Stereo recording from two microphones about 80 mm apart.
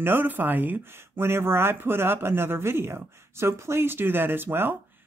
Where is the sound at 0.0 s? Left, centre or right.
Right.